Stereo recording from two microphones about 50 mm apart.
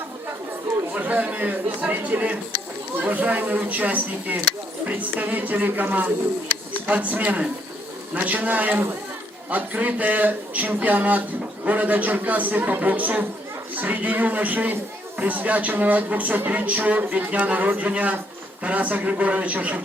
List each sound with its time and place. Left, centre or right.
0.9 s a man's voice: right